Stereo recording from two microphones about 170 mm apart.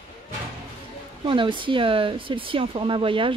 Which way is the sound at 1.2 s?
30° right (ahead or behind).